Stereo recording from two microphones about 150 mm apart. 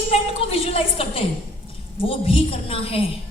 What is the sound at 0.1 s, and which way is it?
A woman's voice, 40° left (ahead or behind).